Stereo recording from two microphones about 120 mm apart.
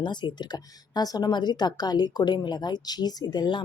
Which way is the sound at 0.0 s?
40° left (ahead or behind).